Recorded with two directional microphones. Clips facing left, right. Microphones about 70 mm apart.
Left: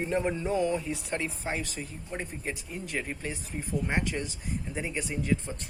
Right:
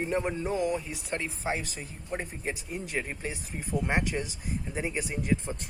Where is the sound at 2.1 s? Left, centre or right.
Centre.